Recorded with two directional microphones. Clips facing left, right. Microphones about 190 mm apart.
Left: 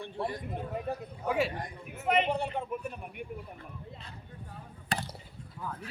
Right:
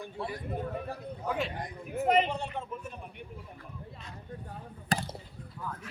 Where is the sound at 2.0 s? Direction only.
35° right (ahead or behind).